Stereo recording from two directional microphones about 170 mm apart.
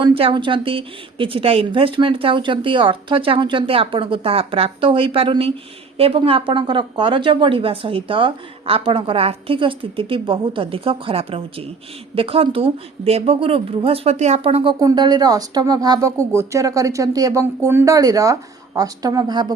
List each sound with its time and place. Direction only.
0.0 s a woman's voice: 30° right (ahead or behind)